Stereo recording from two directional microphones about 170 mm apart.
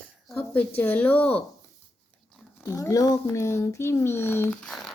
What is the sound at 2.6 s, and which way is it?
Speech, 15° left (ahead or behind).